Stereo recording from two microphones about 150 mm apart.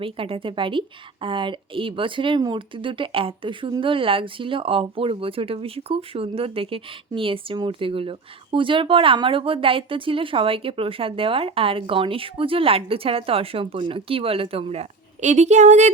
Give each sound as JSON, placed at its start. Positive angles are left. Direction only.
{"t": 0.0, "sound": "a woman's voice", "side_deg": -35}